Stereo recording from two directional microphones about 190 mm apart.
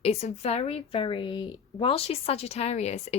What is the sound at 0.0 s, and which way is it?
A woman's voice, 35° left (ahead or behind).